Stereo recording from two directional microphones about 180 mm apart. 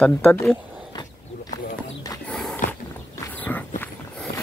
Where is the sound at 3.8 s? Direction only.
10° left (ahead or behind).